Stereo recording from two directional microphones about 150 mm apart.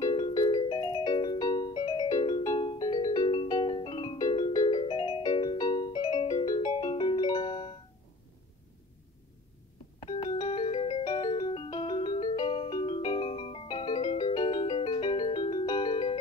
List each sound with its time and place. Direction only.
0.0 s music: 30° left (ahead or behind)
9.9 s music: 35° left (ahead or behind)